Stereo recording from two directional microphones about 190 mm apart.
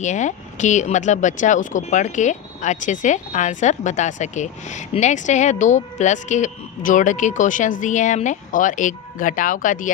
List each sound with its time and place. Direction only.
0.0 s speech: 40° left (ahead or behind)